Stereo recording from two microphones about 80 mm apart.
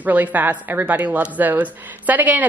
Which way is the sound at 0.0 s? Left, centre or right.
Right.